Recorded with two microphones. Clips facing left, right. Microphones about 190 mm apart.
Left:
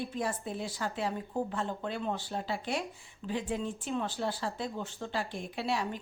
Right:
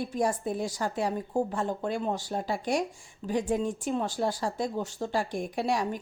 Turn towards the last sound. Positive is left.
turn(degrees=-45)  # may be behind; listen again after turning